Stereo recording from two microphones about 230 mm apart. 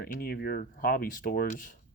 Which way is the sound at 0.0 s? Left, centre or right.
Left.